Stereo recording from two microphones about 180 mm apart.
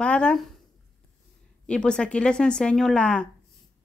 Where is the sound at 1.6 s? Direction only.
5° left (ahead or behind).